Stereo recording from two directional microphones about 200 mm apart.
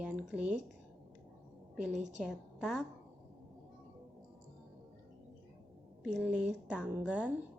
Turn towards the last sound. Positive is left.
turn(degrees=-5)  # may be behind; listen again after turning